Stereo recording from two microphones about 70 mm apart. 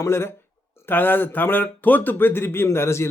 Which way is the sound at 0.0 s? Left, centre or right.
Left.